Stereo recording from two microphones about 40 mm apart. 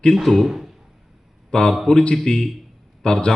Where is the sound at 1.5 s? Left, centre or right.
Left.